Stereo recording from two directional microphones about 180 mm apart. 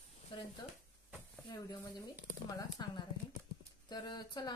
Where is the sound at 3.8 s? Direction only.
25° left (ahead or behind).